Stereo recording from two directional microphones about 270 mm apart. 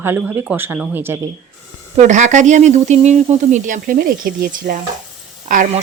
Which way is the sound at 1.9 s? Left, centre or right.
Right.